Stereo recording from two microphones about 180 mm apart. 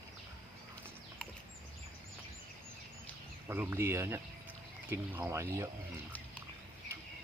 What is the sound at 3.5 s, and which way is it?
Speech, 15° right (ahead or behind).